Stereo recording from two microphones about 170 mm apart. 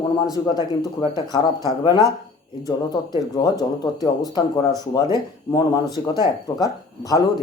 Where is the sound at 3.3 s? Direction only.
25° left (ahead or behind).